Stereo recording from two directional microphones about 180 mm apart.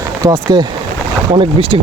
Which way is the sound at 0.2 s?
20° right (ahead or behind).